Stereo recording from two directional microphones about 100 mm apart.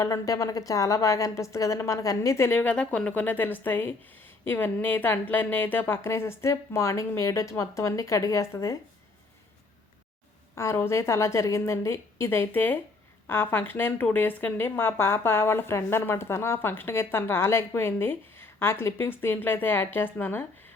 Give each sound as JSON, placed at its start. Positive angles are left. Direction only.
{"t": 0.0, "sound": "a woman's voice", "side_deg": 35}
{"t": 10.5, "sound": "a woman's voice", "side_deg": 25}